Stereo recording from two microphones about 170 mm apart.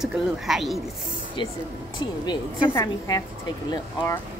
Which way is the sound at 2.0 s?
30° left (ahead or behind).